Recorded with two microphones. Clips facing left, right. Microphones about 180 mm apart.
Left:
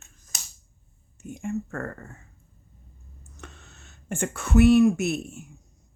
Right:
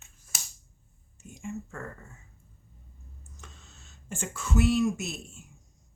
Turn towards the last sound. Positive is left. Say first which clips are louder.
# left 11 dB
turn(degrees=65)  # may be behind; listen again after turning